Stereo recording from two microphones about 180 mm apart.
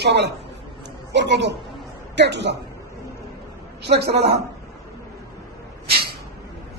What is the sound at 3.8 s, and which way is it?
Speech, 65° right (ahead or behind).